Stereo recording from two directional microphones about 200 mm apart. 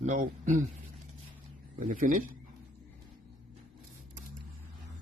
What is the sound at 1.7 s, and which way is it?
Speech, 40° right (ahead or behind).